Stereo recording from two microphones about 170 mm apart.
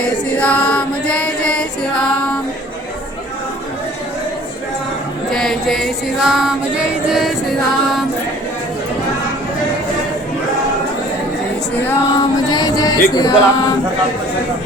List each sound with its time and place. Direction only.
0.0 s music: 10° left (ahead or behind)
5.3 s music: centre (ahead or behind)
11.8 s a sound: 10° left (ahead or behind)
12.5 s music: 25° left (ahead or behind)